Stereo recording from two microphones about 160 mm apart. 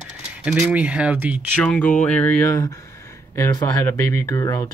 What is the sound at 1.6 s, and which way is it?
Speech, 5° left (ahead or behind).